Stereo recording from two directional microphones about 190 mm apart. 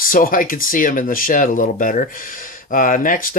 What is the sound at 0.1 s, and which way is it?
Speech, 45° left (ahead or behind).